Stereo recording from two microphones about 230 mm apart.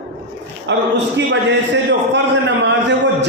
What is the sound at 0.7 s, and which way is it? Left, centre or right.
A man's voice, right.